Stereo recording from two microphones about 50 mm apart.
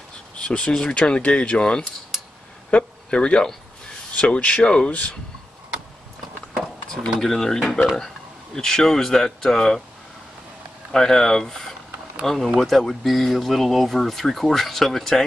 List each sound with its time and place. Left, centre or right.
0.4 s speech: centre
7.2 s speech: centre
10.9 s speech: centre